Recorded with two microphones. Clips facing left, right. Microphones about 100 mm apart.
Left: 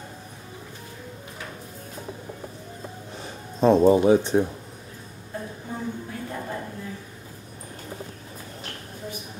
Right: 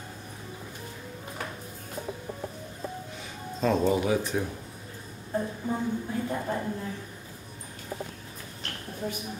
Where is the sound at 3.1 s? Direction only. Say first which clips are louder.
Left 1 dB; 30° left (ahead or behind).